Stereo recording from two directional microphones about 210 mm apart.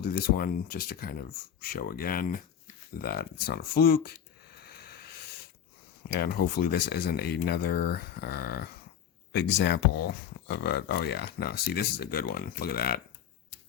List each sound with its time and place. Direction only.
0.0 s speech: 45° left (ahead or behind)
3.0 s a sound: 45° left (ahead or behind)
6.1 s speech: 50° left (ahead or behind)